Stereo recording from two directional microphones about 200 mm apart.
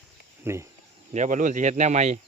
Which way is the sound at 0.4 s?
15° right (ahead or behind).